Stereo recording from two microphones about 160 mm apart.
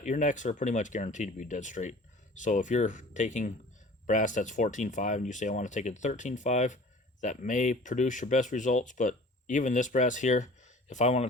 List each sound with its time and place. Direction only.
0.0 s speech: 50° left (ahead or behind)